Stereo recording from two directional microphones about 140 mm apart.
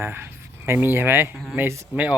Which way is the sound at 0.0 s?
15° right (ahead or behind).